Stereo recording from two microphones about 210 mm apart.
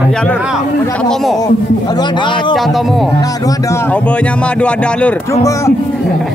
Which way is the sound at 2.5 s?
Centre (ahead or behind).